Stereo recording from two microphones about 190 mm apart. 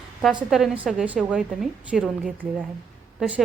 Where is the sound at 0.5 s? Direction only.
Centre (ahead or behind).